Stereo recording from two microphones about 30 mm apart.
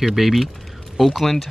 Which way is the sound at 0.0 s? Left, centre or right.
Centre.